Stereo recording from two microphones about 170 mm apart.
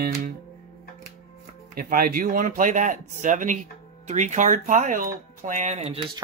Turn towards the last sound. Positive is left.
turn(degrees=-45)  # may be behind; listen again after turning